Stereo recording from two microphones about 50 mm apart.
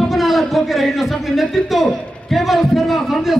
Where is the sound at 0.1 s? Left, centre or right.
Centre.